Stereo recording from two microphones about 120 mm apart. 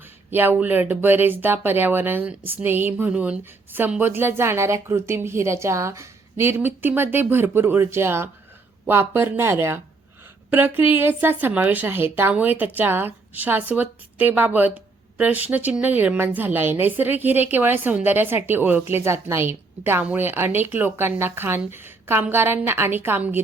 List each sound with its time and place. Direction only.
0.3 s speech: 15° right (ahead or behind)